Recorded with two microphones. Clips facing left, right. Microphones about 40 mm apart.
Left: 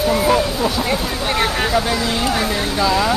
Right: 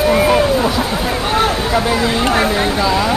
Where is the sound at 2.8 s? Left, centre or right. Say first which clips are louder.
Left 2 dB; centre.